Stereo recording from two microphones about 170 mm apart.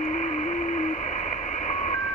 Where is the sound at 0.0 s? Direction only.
40° left (ahead or behind).